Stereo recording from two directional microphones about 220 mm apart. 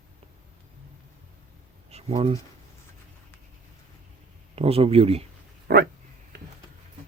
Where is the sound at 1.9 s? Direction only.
30° right (ahead or behind).